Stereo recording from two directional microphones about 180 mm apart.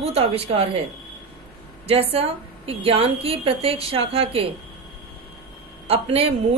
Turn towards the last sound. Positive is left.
turn(degrees=-35)  # may be behind; listen again after turning